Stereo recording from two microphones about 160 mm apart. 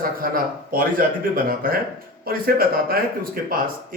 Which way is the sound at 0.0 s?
60° right (ahead or behind).